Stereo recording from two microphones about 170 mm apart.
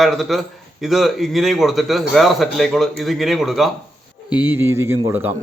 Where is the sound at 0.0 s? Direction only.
Centre (ahead or behind).